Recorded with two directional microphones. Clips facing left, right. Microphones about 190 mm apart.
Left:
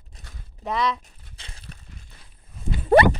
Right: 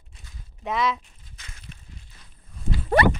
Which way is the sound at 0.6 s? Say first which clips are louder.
Even; centre (ahead or behind).